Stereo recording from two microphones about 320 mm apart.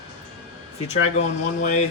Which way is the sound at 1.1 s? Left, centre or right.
Left.